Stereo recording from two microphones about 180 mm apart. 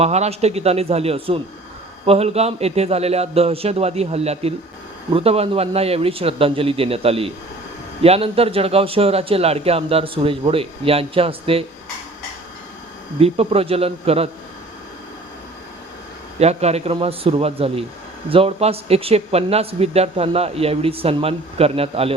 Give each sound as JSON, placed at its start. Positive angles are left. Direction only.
{"t": 0.0, "sound": "speech", "side_deg": -35}
{"t": 13.1, "sound": "speech", "side_deg": -35}
{"t": 16.4, "sound": "speech", "side_deg": -35}